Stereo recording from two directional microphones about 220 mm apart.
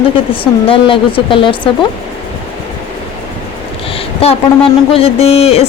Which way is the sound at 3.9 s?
25° left (ahead or behind).